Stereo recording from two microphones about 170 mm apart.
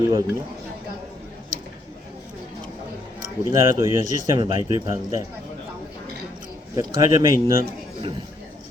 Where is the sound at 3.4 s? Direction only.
15° right (ahead or behind).